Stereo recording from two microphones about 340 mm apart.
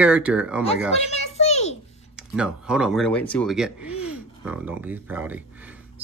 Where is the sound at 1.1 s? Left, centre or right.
Centre.